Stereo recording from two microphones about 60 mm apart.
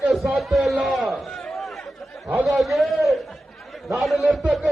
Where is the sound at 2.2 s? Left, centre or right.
Right.